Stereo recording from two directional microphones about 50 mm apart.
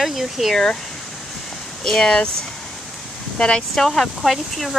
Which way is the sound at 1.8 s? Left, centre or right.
Centre.